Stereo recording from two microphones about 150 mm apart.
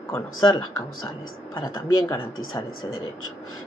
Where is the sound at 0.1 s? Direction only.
20° left (ahead or behind).